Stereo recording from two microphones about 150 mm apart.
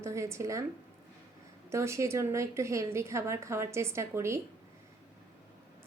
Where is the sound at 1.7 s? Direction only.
20° right (ahead or behind).